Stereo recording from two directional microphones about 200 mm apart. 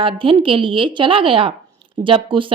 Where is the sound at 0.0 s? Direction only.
25° right (ahead or behind).